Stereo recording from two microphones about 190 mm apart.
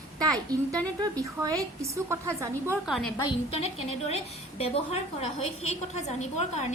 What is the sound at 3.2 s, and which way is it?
A woman's voice, 30° left (ahead or behind).